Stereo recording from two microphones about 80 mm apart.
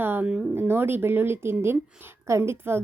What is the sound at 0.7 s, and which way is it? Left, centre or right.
A woman's voice, right.